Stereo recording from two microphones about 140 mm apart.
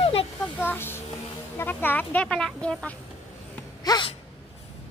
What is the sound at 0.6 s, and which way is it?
A child's voice, 15° left (ahead or behind).